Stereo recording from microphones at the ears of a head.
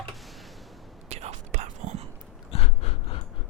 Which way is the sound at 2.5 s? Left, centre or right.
Left.